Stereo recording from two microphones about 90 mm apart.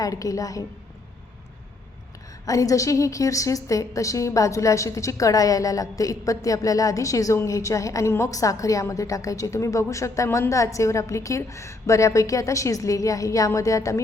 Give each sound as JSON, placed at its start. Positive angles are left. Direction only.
{"t": 0.0, "sound": "a woman's voice", "side_deg": 40}
{"t": 2.5, "sound": "a woman's voice", "side_deg": 40}